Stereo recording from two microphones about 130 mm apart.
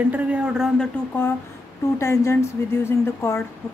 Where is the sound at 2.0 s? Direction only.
20° left (ahead or behind).